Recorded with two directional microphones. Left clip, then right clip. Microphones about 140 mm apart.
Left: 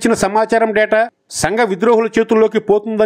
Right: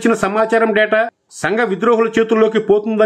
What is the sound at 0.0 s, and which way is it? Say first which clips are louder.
A man's voice: left 1 dB; 30° left (ahead or behind).